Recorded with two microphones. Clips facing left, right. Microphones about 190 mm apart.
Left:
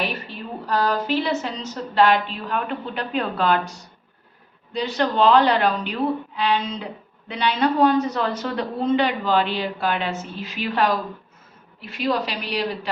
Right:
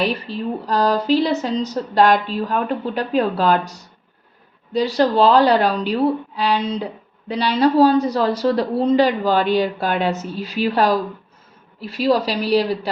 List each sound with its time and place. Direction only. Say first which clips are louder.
0.0 s a woman's voice: right 7 dB; 35° right (ahead or behind)